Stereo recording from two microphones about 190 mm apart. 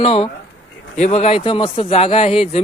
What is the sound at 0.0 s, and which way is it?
A man's voice, 30° left (ahead or behind).